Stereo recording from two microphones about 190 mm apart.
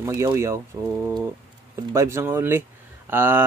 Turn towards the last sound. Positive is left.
turn(degrees=-10)  # may be behind; listen again after turning